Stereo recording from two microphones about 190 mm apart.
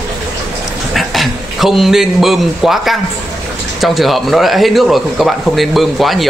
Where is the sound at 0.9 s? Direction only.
Centre (ahead or behind).